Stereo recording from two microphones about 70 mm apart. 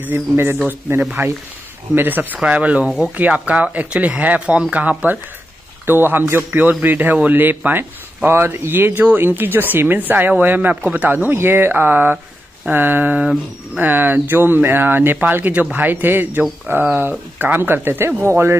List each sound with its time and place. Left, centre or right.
0.0 s a man's voice: right